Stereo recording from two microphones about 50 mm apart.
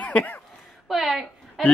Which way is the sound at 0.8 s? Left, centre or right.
Centre.